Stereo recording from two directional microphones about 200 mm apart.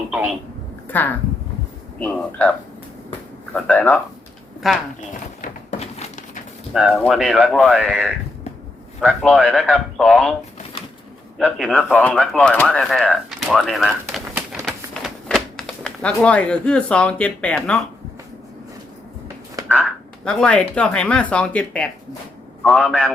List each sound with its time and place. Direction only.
0.1 s speech: 5° right (ahead or behind)
0.9 s speech: 10° left (ahead or behind)
4.9 s a sound: 35° left (ahead or behind)
6.7 s speech: centre (ahead or behind)
11.3 s speech: centre (ahead or behind)
19.6 s speech: 5° left (ahead or behind)